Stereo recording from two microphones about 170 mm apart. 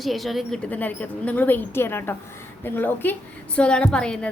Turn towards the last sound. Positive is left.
turn(degrees=5)  # may be behind; listen again after turning